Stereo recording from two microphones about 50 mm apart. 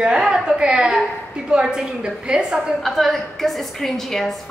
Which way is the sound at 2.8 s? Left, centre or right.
Centre.